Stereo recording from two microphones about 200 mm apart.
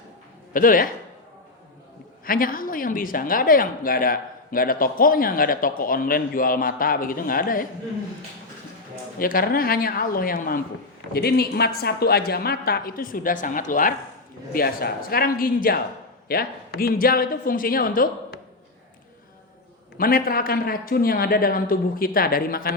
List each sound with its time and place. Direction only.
0.5 s a woman's voice: 45° left (ahead or behind)
2.2 s a woman's voice: 45° left (ahead or behind)
9.1 s a woman's voice: 45° left (ahead or behind)
20.0 s a woman's voice: 45° left (ahead or behind)